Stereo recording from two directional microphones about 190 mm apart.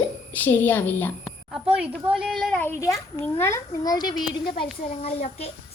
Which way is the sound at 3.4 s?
15° left (ahead or behind).